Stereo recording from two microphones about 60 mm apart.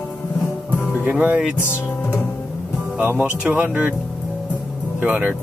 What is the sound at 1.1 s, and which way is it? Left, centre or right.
Music, centre.